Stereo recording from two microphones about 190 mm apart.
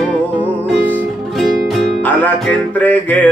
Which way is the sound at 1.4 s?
Centre (ahead or behind).